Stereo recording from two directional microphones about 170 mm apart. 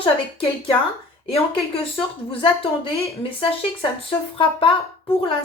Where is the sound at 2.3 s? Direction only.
30° left (ahead or behind).